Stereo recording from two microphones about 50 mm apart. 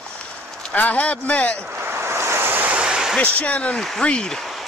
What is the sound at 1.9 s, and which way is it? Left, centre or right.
Waves, right.